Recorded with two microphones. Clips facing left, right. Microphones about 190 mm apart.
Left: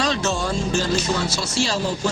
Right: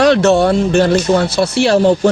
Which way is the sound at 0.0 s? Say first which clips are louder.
Right 13 dB; 65° right (ahead or behind).